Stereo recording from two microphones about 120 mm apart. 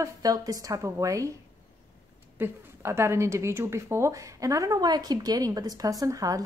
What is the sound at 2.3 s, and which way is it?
A woman's voice, 20° right (ahead or behind).